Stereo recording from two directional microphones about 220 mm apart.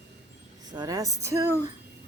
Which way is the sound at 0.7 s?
15° right (ahead or behind).